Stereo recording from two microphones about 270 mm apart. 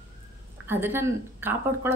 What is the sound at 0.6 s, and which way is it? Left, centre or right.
Speech, centre.